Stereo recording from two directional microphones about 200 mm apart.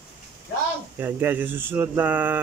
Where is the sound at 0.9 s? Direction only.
10° right (ahead or behind).